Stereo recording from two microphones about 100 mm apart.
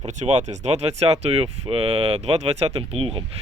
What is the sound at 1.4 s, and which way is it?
Speech, 70° right (ahead or behind).